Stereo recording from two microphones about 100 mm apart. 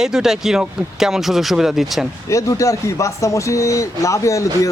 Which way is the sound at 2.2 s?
30° left (ahead or behind).